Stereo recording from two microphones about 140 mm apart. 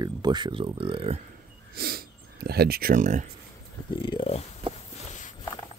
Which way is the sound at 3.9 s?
35° left (ahead or behind).